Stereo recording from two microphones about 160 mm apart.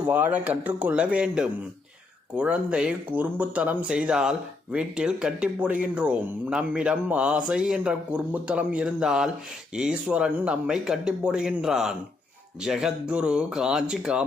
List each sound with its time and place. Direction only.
0.0 s speech: 10° right (ahead or behind)